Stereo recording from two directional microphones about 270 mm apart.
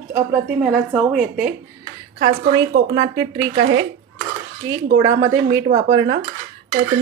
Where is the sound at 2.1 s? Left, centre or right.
Right.